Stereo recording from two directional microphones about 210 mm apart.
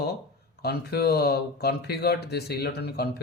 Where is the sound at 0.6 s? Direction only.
50° left (ahead or behind).